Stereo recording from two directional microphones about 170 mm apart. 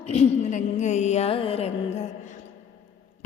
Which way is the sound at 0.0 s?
40° left (ahead or behind).